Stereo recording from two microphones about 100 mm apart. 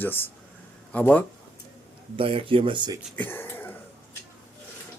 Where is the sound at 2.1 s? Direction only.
65° right (ahead or behind).